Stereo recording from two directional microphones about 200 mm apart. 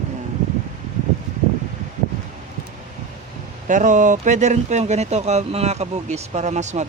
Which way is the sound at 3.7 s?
40° right (ahead or behind).